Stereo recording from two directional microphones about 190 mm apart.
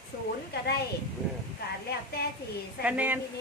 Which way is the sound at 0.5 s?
55° left (ahead or behind).